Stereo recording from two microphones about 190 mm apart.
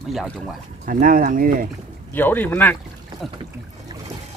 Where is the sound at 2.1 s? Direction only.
10° left (ahead or behind).